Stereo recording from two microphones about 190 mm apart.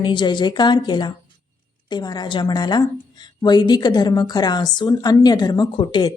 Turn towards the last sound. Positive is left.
turn(degrees=25)  # may be behind; listen again after turning